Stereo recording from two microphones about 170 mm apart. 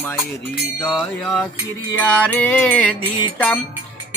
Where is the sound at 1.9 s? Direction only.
10° left (ahead or behind).